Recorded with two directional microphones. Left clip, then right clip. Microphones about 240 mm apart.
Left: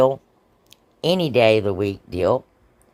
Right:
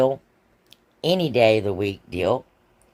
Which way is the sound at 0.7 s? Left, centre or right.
Centre.